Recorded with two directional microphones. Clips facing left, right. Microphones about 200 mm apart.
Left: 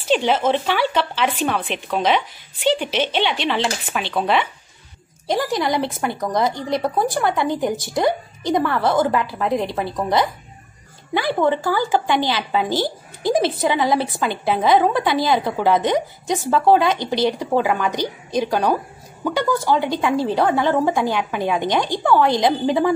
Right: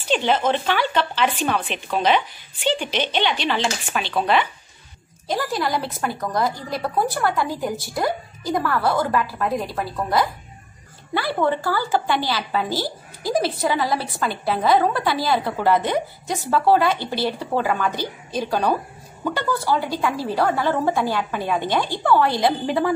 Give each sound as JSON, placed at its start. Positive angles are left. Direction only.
{"t": 0.1, "sound": "speech", "side_deg": 5}
{"t": 5.3, "sound": "a woman's voice", "side_deg": 20}